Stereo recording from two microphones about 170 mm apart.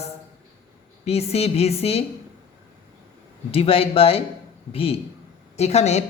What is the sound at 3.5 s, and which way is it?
Speech, 35° left (ahead or behind).